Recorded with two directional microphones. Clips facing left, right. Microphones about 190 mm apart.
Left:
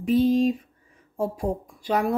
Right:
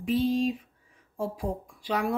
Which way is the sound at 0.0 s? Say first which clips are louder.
Left 6 dB; 40° left (ahead or behind).